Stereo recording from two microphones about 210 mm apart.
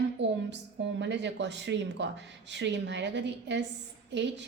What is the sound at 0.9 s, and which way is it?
A woman's voice, 55° right (ahead or behind).